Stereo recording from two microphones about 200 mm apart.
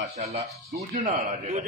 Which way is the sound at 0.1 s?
30° right (ahead or behind).